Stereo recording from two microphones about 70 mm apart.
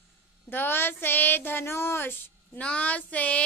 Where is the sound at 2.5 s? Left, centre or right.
Centre.